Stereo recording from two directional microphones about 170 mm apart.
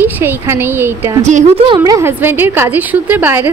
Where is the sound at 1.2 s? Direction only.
45° right (ahead or behind).